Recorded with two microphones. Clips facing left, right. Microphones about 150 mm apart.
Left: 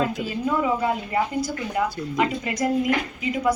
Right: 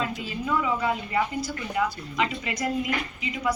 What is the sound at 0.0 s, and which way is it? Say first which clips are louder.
A woman's voice: left 6 dB; 45° left (ahead or behind).